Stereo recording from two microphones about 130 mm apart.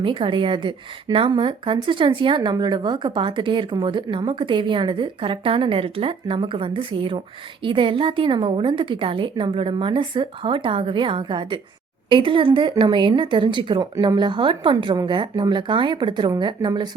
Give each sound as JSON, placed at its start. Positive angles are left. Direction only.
{"t": 0.0, "sound": "a woman's voice", "side_deg": -40}